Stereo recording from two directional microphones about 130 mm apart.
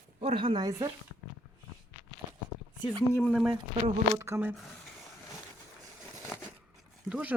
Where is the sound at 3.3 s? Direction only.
5° right (ahead or behind).